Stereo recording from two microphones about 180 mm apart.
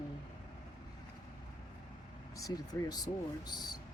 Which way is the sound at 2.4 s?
20° left (ahead or behind).